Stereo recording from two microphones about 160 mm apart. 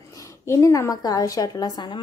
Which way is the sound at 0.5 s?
20° left (ahead or behind).